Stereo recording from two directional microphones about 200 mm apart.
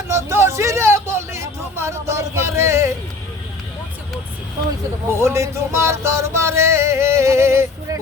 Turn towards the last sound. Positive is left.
turn(degrees=-15)  # may be behind; listen again after turning